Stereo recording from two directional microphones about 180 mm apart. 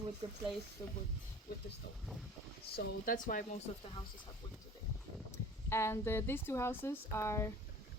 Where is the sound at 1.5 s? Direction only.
55° left (ahead or behind).